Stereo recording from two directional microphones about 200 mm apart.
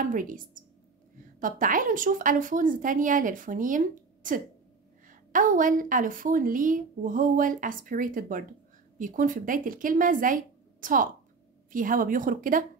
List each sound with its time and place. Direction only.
0.0 s a woman's voice: 40° right (ahead or behind)
1.4 s a woman's voice: 45° right (ahead or behind)